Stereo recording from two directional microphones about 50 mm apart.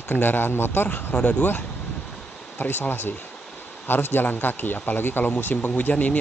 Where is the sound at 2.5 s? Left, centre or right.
Left.